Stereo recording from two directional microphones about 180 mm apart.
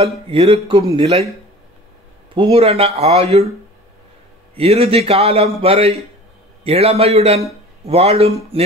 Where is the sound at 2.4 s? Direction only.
35° right (ahead or behind).